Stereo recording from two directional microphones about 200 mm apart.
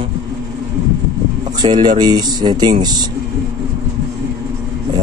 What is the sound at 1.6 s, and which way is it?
Speech, 20° right (ahead or behind).